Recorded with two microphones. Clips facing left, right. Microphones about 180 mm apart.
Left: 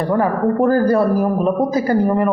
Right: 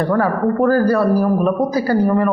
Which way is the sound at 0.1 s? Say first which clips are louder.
Even; 20° left (ahead or behind).